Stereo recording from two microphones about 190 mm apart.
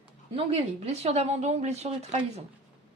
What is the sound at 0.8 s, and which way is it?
A woman's voice, 35° right (ahead or behind).